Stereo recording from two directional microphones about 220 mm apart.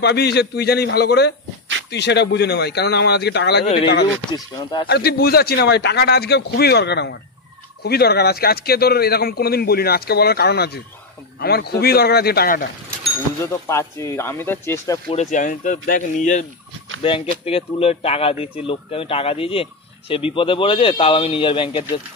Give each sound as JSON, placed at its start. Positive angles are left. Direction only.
{"t": 0.0, "sound": "a man's voice", "side_deg": 50}
{"t": 4.1, "sound": "speech", "side_deg": 20}
{"t": 4.8, "sound": "a man's voice", "side_deg": 45}
{"t": 13.4, "sound": "speech", "side_deg": 10}
{"t": 15.0, "sound": "speech", "side_deg": 30}
{"t": 17.5, "sound": "speech", "side_deg": 25}